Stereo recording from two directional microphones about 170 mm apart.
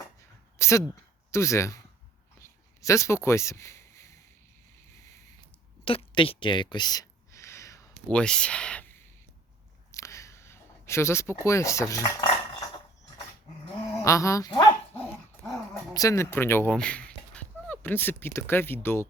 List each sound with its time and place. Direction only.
0.6 s speech: 15° left (ahead or behind)
2.8 s speech: 15° left (ahead or behind)
5.8 s a sound: 30° left (ahead or behind)
8.1 s speech: 5° left (ahead or behind)
9.9 s a sound: 15° left (ahead or behind)
14.0 s dog: 20° left (ahead or behind)
16.0 s speech: 15° left (ahead or behind)